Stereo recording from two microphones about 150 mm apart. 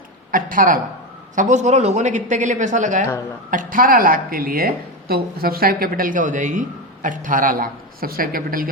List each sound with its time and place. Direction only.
0.3 s speech: 70° right (ahead or behind)
1.4 s speech: 50° right (ahead or behind)
3.5 s a woman's voice: 65° right (ahead or behind)